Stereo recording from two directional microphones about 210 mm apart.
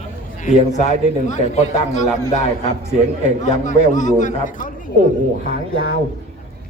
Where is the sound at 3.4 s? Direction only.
35° left (ahead or behind).